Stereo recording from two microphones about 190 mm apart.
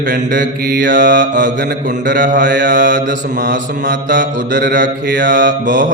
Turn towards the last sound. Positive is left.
turn(degrees=-45)  # may be behind; listen again after turning